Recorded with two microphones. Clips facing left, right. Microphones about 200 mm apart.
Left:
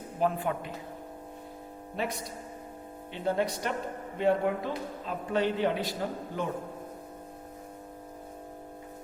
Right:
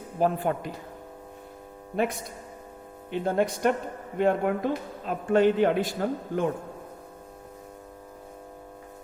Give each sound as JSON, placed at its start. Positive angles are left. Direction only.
{"t": 0.2, "sound": "a man's voice", "side_deg": -40}
{"t": 2.0, "sound": "a man's voice", "side_deg": -50}